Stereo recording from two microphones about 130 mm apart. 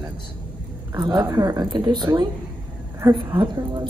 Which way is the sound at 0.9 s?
25° right (ahead or behind).